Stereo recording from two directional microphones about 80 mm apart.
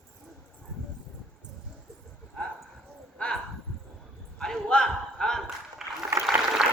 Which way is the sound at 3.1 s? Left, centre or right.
Centre.